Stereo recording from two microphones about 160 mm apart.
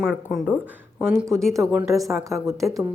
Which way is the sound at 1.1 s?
15° right (ahead or behind).